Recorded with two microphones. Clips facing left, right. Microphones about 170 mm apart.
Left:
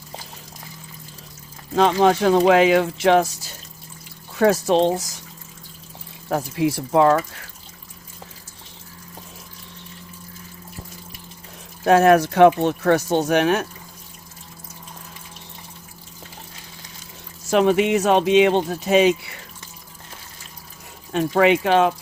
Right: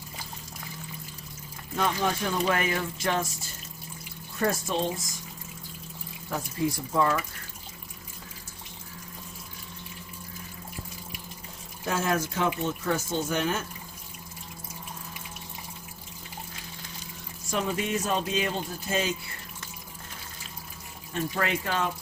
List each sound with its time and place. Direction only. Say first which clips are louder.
1.7 s speech: left 11 dB; 90° left
6.2 s speech: left 8 dB; 80° left
11.9 s speech: left 14 dB; 70° left (ahead or behind)
17.5 s speech: left 12 dB; 85° left
21.1 s speech: left 12 dB; 80° left